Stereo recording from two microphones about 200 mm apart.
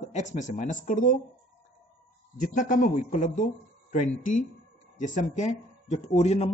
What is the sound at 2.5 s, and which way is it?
Speech, 40° left (ahead or behind).